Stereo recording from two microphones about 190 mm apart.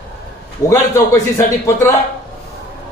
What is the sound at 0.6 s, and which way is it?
A man's voice, 15° left (ahead or behind).